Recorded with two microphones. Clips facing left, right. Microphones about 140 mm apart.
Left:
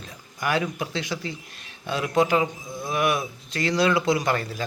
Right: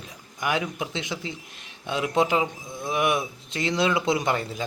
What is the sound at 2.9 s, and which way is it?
Speech, 20° right (ahead or behind).